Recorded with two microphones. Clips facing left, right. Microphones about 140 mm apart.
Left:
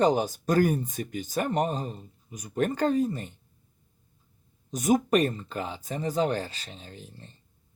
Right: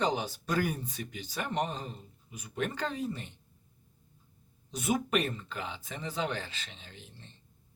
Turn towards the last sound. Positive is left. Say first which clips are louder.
# left 6 dB
turn(degrees=40)  # may be behind; listen again after turning